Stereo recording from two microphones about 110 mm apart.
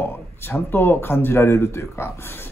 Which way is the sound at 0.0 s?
20° left (ahead or behind).